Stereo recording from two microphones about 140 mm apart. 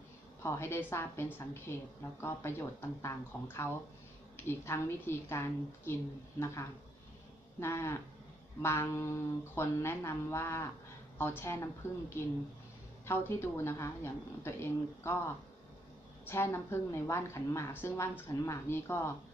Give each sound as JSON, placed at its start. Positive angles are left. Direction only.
{"t": 0.4, "sound": "a woman's voice", "side_deg": 20}
{"t": 7.6, "sound": "a woman's voice", "side_deg": 20}
{"t": 16.3, "sound": "a woman's voice", "side_deg": 15}